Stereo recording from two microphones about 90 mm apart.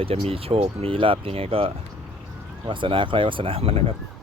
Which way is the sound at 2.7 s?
65° right (ahead or behind).